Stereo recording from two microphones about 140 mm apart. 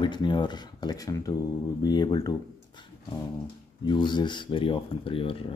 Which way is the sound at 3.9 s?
30° left (ahead or behind).